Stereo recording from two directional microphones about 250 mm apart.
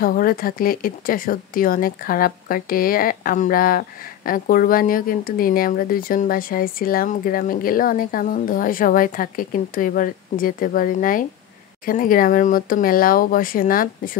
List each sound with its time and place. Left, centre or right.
0.0 s speech: left